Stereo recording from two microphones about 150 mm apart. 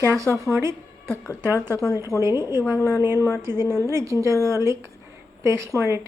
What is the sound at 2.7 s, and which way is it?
Speech, 20° left (ahead or behind).